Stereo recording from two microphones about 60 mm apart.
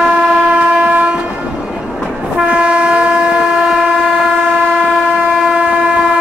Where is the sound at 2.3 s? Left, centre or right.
Centre.